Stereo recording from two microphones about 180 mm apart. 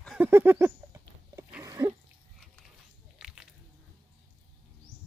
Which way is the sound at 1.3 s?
15° right (ahead or behind).